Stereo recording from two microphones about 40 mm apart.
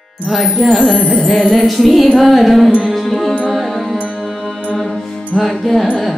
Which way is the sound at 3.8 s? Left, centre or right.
Left.